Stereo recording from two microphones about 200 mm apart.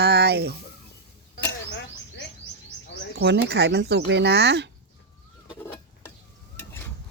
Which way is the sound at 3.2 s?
55° right (ahead or behind).